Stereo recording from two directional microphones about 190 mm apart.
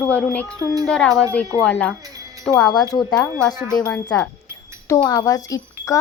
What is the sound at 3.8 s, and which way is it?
Speech, 10° left (ahead or behind).